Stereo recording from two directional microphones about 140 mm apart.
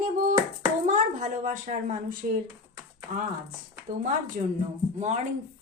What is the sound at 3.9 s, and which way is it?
Speech, 80° right.